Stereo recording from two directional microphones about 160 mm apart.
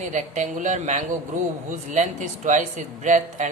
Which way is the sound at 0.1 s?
50° right (ahead or behind).